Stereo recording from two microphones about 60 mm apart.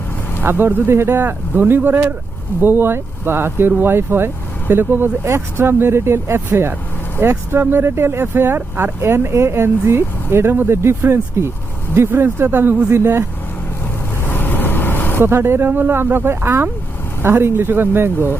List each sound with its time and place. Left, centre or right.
0.4 s speech: right
5.2 s speech: right
14.3 s vehicle: left
15.2 s speech: right